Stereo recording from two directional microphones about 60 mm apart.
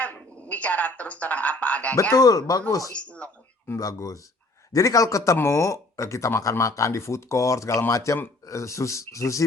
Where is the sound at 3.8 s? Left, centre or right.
Left.